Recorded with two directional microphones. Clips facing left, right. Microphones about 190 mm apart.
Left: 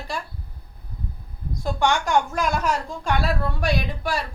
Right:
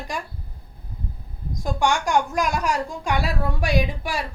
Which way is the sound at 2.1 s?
15° right (ahead or behind).